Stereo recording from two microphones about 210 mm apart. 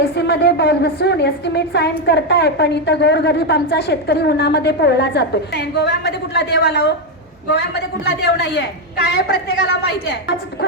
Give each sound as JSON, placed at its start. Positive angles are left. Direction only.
{"t": 0.2, "sound": "a woman's voice", "side_deg": 55}